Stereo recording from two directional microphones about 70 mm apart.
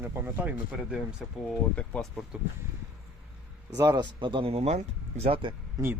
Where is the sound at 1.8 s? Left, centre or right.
Centre.